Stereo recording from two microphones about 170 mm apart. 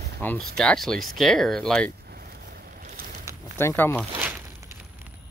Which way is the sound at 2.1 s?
65° right (ahead or behind).